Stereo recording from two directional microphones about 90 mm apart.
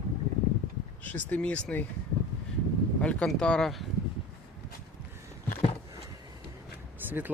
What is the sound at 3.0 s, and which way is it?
Speech, 10° left (ahead or behind).